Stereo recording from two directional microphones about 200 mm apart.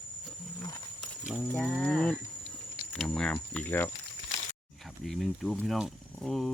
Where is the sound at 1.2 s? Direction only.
5° left (ahead or behind).